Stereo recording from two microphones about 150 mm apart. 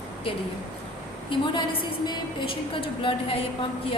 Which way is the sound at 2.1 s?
35° left (ahead or behind).